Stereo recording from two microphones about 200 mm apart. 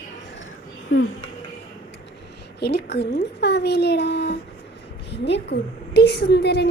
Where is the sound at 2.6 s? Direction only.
55° left (ahead or behind).